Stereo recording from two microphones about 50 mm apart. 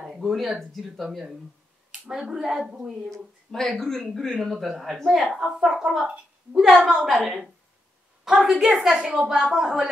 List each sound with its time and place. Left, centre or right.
0.2 s speech: centre
1.9 s a woman's voice: centre
3.1 s speech: centre
5.6 s a woman's voice: centre
6.9 s a woman's voice: centre
8.3 s a woman's voice: centre